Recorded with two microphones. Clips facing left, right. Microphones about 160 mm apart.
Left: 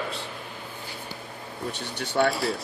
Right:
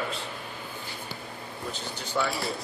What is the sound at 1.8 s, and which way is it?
Speech, 65° left (ahead or behind).